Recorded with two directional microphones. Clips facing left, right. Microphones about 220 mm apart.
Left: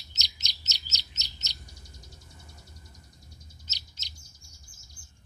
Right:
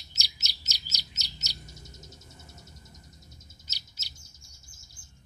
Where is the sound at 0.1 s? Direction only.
10° right (ahead or behind).